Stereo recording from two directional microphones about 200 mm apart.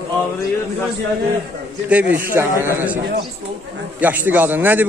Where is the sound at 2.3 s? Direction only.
10° right (ahead or behind).